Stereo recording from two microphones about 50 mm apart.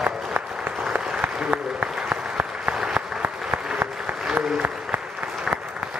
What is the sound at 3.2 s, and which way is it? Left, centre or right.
Applause, right.